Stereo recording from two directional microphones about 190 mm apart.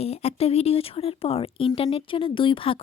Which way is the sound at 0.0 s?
35° left (ahead or behind).